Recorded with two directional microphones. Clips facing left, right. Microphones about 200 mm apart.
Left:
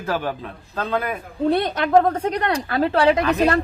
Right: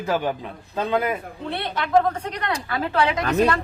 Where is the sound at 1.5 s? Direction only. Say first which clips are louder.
Left 4 dB; 40° left (ahead or behind).